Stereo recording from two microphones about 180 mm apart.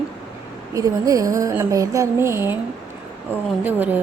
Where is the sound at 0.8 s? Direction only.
20° right (ahead or behind).